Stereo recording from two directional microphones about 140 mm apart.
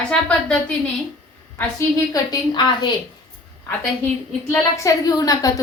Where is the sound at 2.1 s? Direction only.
35° left (ahead or behind).